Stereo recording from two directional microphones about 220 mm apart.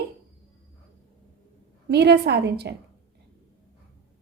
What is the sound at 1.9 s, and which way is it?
Speech, 50° right (ahead or behind).